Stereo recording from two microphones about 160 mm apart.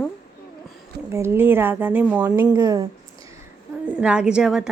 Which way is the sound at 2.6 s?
20° right (ahead or behind).